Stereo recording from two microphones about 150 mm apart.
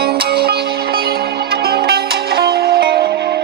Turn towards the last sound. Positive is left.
turn(degrees=-90)